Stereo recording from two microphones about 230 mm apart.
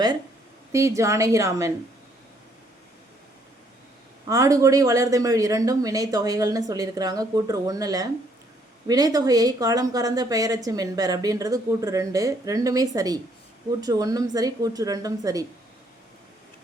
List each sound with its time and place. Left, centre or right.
0.7 s speech: centre
4.3 s speech: centre